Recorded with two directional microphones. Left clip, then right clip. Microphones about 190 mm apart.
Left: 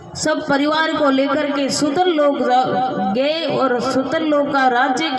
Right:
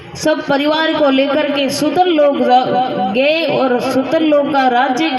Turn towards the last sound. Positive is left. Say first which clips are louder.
# right 3 dB
turn(degrees=-45)  # may be behind; listen again after turning